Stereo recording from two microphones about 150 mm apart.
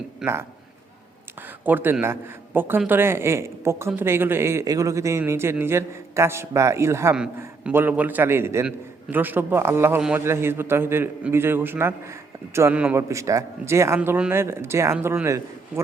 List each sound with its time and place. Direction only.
0.2 s a man's voice: 5° right (ahead or behind)
1.4 s speech: 10° right (ahead or behind)